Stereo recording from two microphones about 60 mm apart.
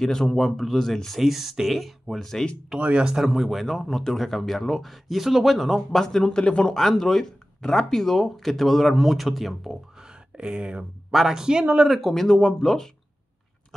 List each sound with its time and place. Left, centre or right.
0.0 s speech: centre
1.2 s speech: centre
2.8 s speech: centre
5.9 s speech: centre
10.3 s speech: centre
11.1 s speech: centre
11.9 s speech: centre